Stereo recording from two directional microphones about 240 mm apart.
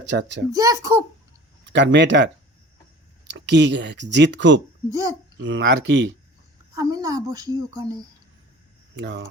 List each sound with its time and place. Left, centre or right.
0.1 s speech: right
0.5 s a woman's voice: centre
1.6 s speech: right
4.9 s a woman's voice: centre
5.4 s speech: right
6.7 s a woman's voice: centre
9.0 s speech: right